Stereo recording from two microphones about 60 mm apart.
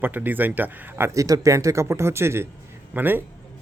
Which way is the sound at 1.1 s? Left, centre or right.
Right.